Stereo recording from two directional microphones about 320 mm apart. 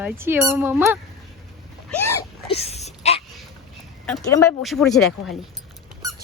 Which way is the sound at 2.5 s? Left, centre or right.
Centre.